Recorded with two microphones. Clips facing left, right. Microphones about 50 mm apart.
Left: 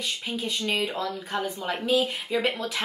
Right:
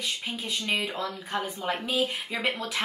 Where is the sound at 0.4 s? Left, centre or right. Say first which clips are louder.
Left 3 dB; centre.